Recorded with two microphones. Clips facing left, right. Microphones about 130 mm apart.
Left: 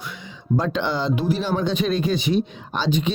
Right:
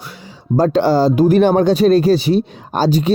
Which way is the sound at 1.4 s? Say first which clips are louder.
Right 11 dB; 55° right (ahead or behind).